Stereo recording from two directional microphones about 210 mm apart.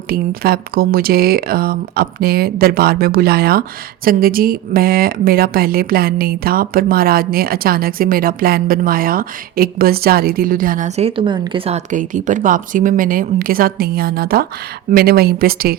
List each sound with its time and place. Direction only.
0.1 s speech: 45° right (ahead or behind)